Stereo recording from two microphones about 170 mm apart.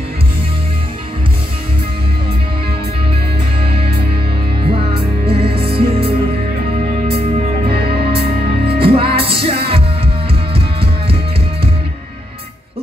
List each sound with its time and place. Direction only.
4.6 s music: 35° right (ahead or behind)
8.7 s music: 35° right (ahead or behind)